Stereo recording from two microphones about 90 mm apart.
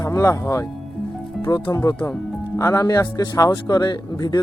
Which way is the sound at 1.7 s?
35° left (ahead or behind).